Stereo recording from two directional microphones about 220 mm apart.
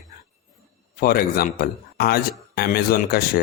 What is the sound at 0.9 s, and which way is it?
Speech, 45° left (ahead or behind).